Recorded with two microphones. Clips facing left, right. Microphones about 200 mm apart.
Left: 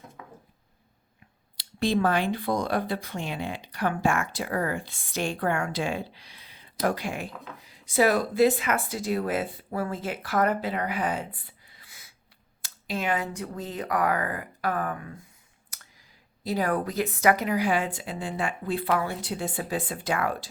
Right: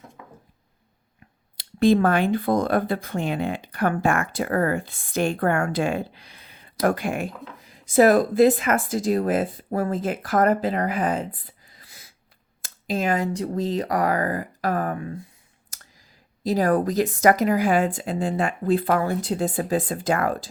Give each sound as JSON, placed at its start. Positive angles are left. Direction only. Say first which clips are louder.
{"t": 1.5, "sound": "speech", "louder": "right 7 dB", "side_deg": -50}
{"t": 11.4, "sound": "a sound", "louder": "right 4 dB", "side_deg": -40}
{"t": 12.6, "sound": "speech", "louder": "right 5 dB", "side_deg": -45}
{"t": 15.7, "sound": "clicking", "louder": "right 3 dB", "side_deg": -40}
{"t": 16.5, "sound": "speech", "louder": "right 6 dB", "side_deg": -40}